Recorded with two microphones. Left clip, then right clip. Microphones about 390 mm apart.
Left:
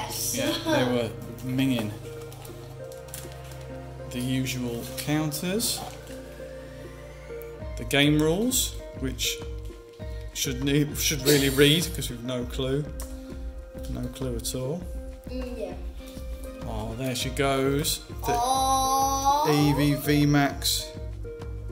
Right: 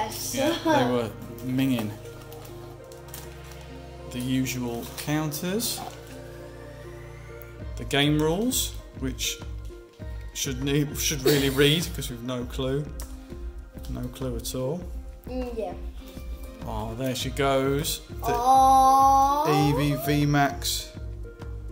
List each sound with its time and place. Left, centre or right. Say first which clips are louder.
0.3 s speech: right 3 dB; centre
4.1 s speech: right 1 dB; centre
7.8 s speech: left 1 dB; centre
13.9 s speech: even; centre
16.6 s speech: right 2 dB; centre
18.4 s music: right 8 dB; centre
19.4 s speech: even; centre